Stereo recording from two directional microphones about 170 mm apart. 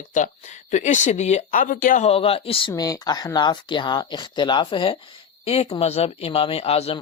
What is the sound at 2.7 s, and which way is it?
Speech, 20° left (ahead or behind).